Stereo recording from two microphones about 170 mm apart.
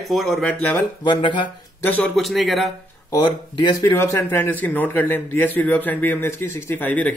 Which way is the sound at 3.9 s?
10° left (ahead or behind).